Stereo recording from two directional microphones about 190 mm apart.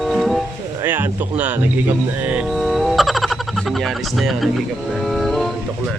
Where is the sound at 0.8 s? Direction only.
10° right (ahead or behind).